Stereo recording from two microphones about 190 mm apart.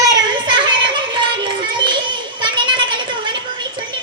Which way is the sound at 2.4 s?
25° right (ahead or behind).